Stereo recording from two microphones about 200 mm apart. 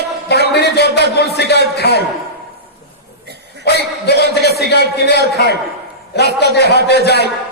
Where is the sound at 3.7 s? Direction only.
55° left (ahead or behind).